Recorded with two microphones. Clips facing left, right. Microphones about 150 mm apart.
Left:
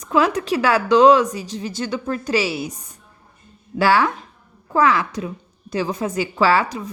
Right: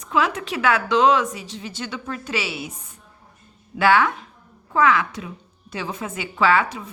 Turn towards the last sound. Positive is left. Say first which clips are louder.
# left 2 dB
turn(degrees=35)  # may be behind; listen again after turning